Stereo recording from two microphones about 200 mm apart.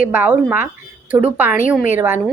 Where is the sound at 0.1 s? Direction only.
10° right (ahead or behind).